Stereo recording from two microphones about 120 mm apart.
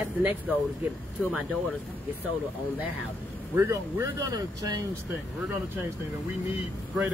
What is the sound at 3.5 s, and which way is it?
Speech, 25° right (ahead or behind).